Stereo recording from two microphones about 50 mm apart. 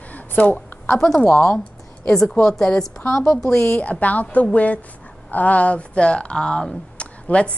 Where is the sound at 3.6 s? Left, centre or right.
Left.